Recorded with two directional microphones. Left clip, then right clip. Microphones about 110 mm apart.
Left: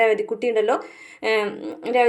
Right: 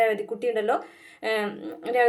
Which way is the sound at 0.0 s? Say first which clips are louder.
Left 4 dB; 25° left (ahead or behind).